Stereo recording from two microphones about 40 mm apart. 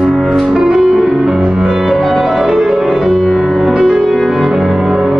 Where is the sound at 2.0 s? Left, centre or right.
Centre.